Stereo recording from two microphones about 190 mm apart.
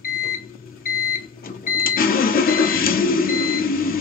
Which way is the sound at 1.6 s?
50° left (ahead or behind).